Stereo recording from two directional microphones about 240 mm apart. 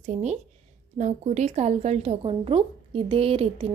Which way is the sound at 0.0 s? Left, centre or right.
Right.